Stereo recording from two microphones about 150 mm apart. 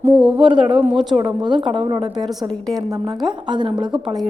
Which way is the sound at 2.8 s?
20° right (ahead or behind).